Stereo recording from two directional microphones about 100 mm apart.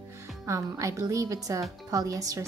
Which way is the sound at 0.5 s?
30° right (ahead or behind).